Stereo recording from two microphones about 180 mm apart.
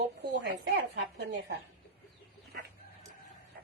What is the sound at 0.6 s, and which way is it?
Speech, 70° right (ahead or behind).